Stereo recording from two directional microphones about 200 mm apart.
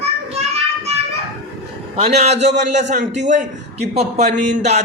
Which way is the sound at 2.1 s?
35° right (ahead or behind).